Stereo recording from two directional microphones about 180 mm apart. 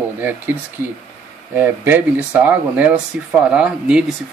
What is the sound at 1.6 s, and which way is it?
Speech, 10° right (ahead or behind).